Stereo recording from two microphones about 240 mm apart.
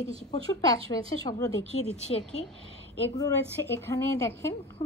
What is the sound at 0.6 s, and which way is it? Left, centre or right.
Speech, centre.